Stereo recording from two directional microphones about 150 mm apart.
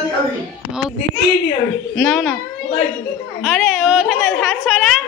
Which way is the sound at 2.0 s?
Centre (ahead or behind).